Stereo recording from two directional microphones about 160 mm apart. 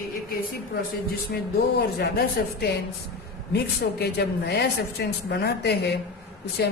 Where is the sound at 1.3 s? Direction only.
80° left.